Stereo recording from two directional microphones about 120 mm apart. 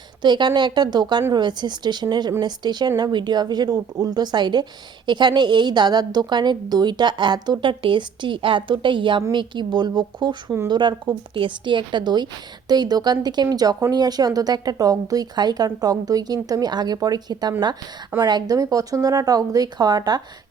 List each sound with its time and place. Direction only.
0.2 s a woman's voice: 40° right (ahead or behind)